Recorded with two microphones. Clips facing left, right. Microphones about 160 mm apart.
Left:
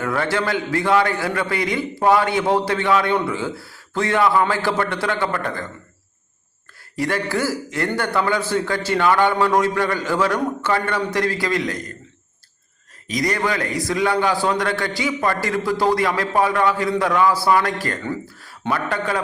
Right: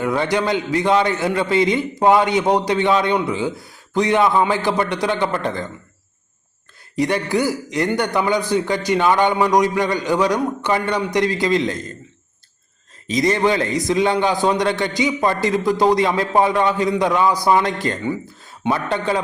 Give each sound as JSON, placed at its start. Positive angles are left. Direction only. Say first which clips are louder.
{"t": 0.0, "sound": "a man's voice", "louder": "right 3 dB", "side_deg": -20}
{"t": 6.9, "sound": "a man's voice", "louder": "right 3 dB", "side_deg": -20}
{"t": 13.1, "sound": "a man's voice", "louder": "right 5 dB", "side_deg": -25}